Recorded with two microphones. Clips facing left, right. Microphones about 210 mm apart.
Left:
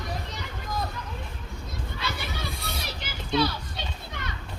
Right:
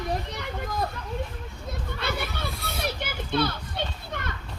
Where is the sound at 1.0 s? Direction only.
60° right (ahead or behind).